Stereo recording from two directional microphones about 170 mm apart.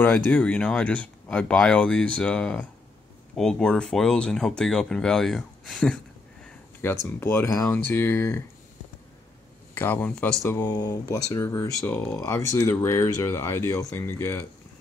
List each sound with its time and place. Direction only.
0.0 s speech: 10° left (ahead or behind)
6.8 s speech: 15° left (ahead or behind)
9.8 s speech: 10° left (ahead or behind)